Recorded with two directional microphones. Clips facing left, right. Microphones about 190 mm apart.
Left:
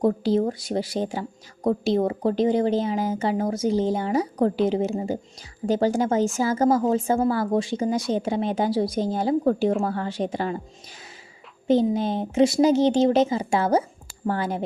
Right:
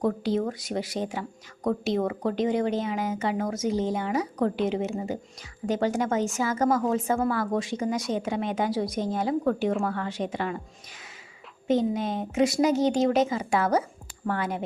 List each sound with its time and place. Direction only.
0.0 s a woman's voice: 30° left (ahead or behind)
11.7 s a woman's voice: 30° left (ahead or behind)